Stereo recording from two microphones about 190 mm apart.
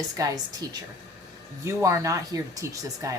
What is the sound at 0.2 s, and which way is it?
Speech, 20° right (ahead or behind).